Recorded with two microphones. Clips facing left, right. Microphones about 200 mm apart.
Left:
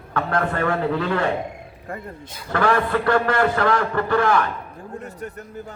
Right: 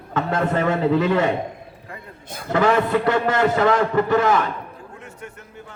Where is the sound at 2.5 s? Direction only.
20° right (ahead or behind).